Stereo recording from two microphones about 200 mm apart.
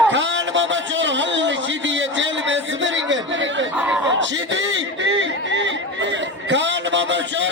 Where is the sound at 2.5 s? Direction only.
65° right (ahead or behind).